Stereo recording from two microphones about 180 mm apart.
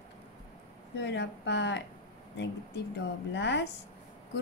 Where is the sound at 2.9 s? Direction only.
75° left (ahead or behind).